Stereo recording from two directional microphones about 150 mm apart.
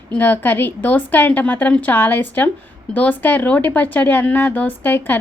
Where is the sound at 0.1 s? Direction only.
10° left (ahead or behind).